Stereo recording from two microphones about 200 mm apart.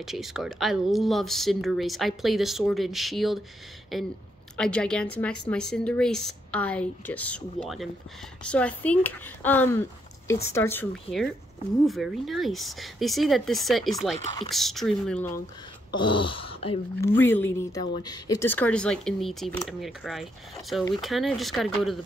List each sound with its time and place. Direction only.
0.0 s speech: centre (ahead or behind)
16.0 s speech: 25° left (ahead or behind)
17.0 s speech: 10° left (ahead or behind)